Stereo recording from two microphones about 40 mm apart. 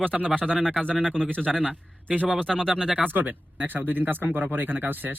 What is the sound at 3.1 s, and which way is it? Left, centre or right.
Speech, right.